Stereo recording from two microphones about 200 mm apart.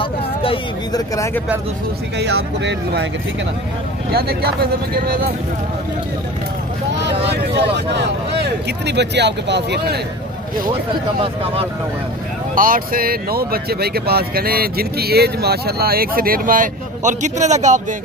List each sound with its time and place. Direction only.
0.0 s a sound: 25° left (ahead or behind)
2.1 s speech: 55° right (ahead or behind)
4.1 s speech: 50° right (ahead or behind)
7.3 s speech: 55° right (ahead or behind)
11.1 s speech: 30° right (ahead or behind)
12.5 s speech: 45° right (ahead or behind)